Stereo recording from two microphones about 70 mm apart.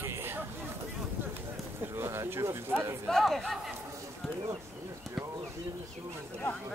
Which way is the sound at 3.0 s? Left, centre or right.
Centre.